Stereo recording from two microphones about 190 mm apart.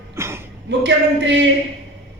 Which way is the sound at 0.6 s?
65° right (ahead or behind).